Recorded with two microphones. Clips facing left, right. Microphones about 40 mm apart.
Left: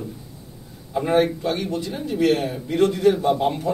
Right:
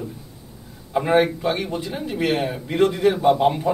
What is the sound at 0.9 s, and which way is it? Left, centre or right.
A man's voice, right.